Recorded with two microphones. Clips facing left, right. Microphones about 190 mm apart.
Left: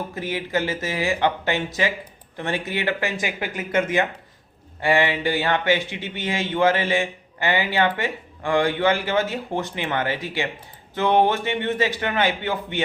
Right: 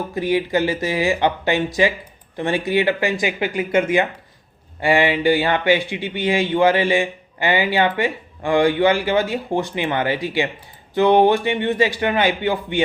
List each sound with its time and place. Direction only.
0.1 s speech: 15° right (ahead or behind)